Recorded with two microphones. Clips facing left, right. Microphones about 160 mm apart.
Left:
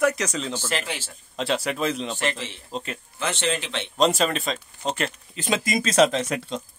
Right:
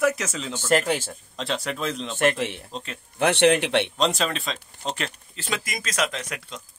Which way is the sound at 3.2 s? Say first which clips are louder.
Right 8 dB; 65° right (ahead or behind).